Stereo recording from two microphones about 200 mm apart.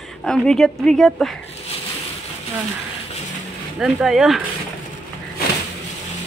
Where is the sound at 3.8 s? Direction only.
Centre (ahead or behind).